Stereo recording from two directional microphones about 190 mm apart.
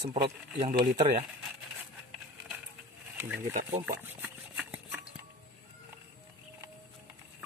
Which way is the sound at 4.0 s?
10° right (ahead or behind).